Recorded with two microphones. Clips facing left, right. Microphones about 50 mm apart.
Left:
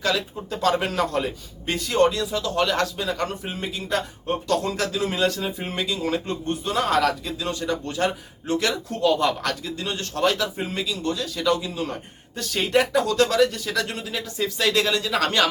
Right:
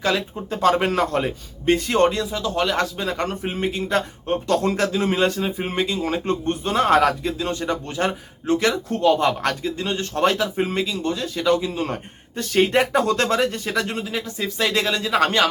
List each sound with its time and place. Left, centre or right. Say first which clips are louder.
0.0 s a man's voice: right 2 dB; right
2.3 s speech: right 1 dB; centre
3.0 s a man's voice: right 2 dB; right
6.2 s a man's voice: right 4 dB; right
12.9 s speech: right 1 dB; right; by 15.4 s centre